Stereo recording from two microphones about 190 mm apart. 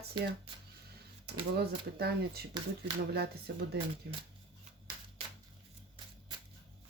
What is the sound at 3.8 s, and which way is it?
Speech, 60° right (ahead or behind).